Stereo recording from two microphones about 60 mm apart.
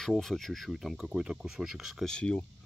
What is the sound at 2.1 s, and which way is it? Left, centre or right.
Speech, centre.